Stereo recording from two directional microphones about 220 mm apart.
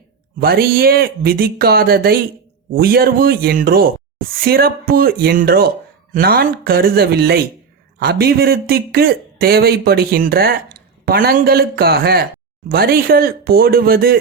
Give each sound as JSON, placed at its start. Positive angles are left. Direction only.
{"t": 0.3, "sound": "speech", "side_deg": -45}